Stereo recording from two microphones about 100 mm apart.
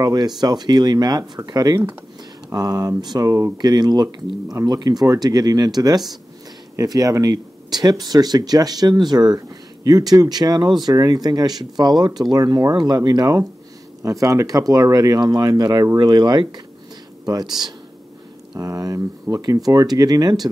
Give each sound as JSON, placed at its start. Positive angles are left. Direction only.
{"t": 0.0, "sound": "speech", "side_deg": -40}
{"t": 3.5, "sound": "speech", "side_deg": -45}
{"t": 18.6, "sound": "speech", "side_deg": -35}